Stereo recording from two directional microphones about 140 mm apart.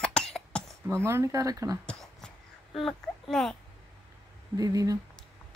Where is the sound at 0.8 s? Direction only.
20° right (ahead or behind).